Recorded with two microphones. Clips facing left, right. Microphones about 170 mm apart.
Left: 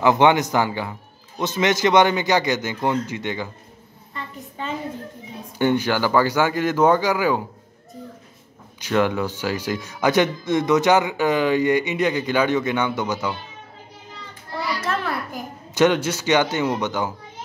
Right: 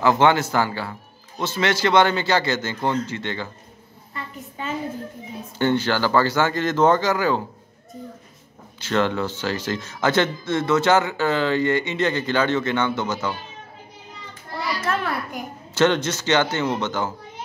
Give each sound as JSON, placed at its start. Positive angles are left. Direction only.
{"t": 0.0, "sound": "speech", "side_deg": 15}
{"t": 4.1, "sound": "a sound", "side_deg": -5}
{"t": 5.6, "sound": "speech", "side_deg": 15}
{"t": 8.7, "sound": "speech", "side_deg": 15}
{"t": 14.9, "sound": "a sound", "side_deg": 0}
{"t": 15.7, "sound": "speech", "side_deg": 10}